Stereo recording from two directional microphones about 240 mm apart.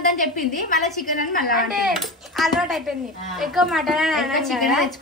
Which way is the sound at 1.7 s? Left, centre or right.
Centre.